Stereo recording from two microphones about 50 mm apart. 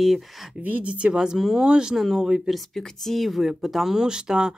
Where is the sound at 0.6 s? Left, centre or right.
Right.